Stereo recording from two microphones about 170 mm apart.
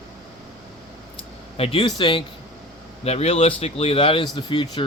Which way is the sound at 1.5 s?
35° left (ahead or behind).